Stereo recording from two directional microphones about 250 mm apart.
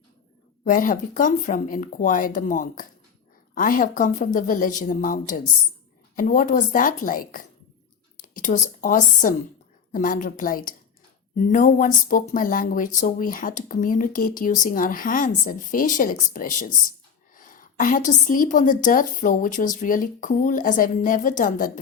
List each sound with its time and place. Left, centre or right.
0.6 s a woman's voice: left